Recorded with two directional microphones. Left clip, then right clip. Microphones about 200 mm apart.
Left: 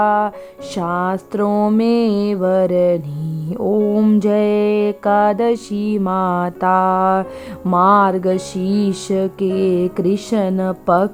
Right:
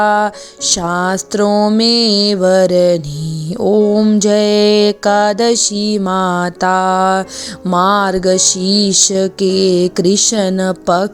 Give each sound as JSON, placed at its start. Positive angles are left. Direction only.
{"t": 0.0, "sound": "mantra", "side_deg": -30}
{"t": 1.5, "sound": "a sound", "side_deg": -15}
{"t": 1.8, "sound": "mantra", "side_deg": -30}
{"t": 3.9, "sound": "mantra", "side_deg": -20}
{"t": 4.3, "sound": "mantra", "side_deg": -35}